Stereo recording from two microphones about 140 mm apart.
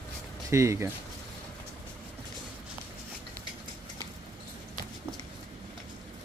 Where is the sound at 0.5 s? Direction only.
20° right (ahead or behind).